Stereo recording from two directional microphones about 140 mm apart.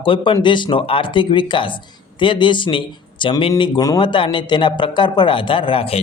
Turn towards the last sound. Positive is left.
turn(degrees=40)  # may be behind; listen again after turning